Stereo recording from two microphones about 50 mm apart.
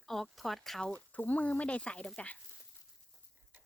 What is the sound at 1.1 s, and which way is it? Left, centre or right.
Speech, left.